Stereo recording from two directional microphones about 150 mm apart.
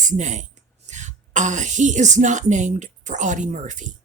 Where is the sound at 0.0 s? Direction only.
55° right (ahead or behind).